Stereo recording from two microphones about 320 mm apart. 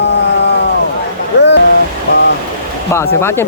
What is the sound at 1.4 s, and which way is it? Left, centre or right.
Waves, left.